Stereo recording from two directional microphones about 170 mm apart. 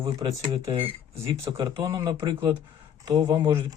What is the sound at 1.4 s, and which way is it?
Speech, 20° right (ahead or behind).